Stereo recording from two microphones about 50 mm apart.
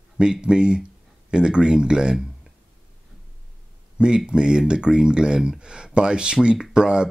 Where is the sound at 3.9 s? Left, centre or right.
Centre.